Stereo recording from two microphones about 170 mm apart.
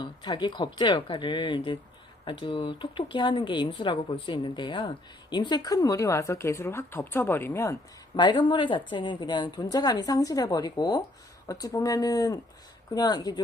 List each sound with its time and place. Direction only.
0.0 s speech: 25° left (ahead or behind)